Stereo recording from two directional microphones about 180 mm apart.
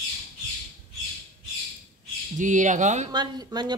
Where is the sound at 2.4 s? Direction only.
45° right (ahead or behind).